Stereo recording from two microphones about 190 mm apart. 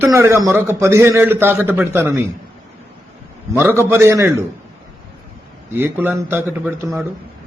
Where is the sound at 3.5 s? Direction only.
10° right (ahead or behind).